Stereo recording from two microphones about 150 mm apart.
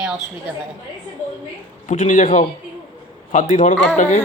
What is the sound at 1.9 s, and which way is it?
A man's voice, 60° left (ahead or behind).